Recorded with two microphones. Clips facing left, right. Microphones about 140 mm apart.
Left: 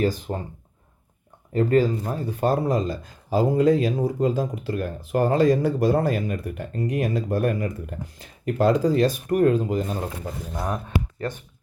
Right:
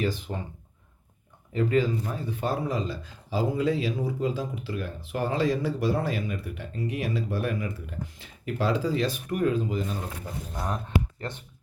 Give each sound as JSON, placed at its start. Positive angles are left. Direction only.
{"t": 0.0, "sound": "speech", "side_deg": 40}
{"t": 1.5, "sound": "speech", "side_deg": 40}
{"t": 10.5, "sound": "speech", "side_deg": 15}